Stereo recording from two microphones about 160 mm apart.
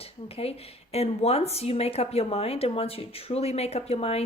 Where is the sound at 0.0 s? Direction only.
40° left (ahead or behind).